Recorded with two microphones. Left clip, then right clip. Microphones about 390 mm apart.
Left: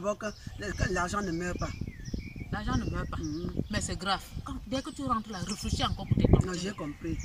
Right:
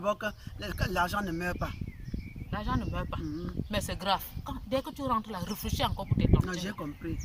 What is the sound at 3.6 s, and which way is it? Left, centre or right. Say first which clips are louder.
Speech: left 3 dB; left.